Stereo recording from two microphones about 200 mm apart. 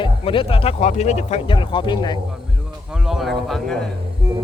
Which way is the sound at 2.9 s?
Centre (ahead or behind).